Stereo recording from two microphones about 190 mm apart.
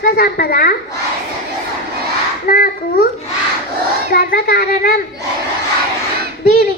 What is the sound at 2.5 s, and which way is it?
Speech, 50° left (ahead or behind).